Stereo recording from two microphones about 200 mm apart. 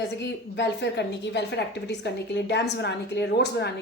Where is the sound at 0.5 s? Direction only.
60° left (ahead or behind).